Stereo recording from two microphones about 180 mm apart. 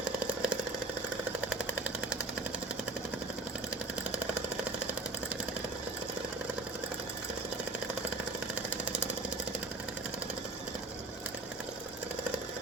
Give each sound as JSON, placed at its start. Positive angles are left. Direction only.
{"t": 0.3, "sound": "chainsaw", "side_deg": -5}
{"t": 8.8, "sound": "engine", "side_deg": -5}